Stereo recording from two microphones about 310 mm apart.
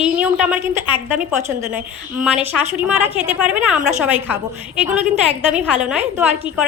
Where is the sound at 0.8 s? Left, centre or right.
Centre.